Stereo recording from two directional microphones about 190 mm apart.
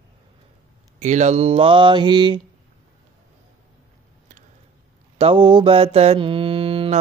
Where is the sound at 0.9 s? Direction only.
40° right (ahead or behind).